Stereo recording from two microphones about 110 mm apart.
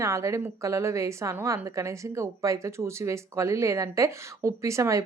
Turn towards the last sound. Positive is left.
turn(degrees=-25)  # may be behind; listen again after turning